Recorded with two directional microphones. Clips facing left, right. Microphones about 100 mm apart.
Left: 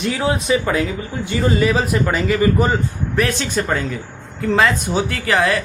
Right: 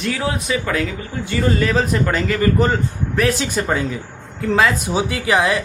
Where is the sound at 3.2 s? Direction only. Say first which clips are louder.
Right 1 dB; 5° right (ahead or behind).